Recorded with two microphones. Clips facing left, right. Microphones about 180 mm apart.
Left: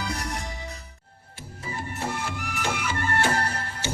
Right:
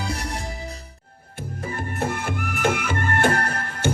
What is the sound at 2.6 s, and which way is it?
Music, 55° right (ahead or behind).